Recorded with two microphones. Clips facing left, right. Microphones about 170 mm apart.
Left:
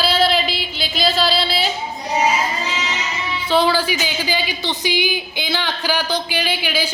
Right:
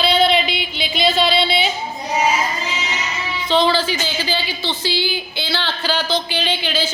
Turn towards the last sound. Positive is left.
turn(degrees=10)  # may be behind; listen again after turning